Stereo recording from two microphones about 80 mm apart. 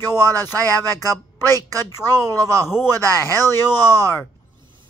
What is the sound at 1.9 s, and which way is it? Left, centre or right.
Speech, left.